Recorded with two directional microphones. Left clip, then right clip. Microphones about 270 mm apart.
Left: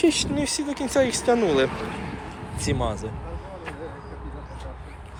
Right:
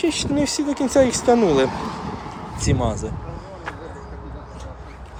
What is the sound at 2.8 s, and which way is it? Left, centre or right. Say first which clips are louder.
Speech: right 4 dB; right.